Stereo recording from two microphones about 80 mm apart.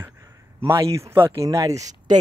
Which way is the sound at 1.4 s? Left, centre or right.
Right.